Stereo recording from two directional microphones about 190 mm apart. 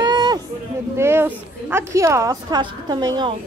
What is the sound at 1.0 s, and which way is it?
A woman's voice, 10° right (ahead or behind).